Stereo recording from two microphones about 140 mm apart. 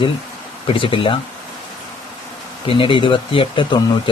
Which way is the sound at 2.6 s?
40° left (ahead or behind).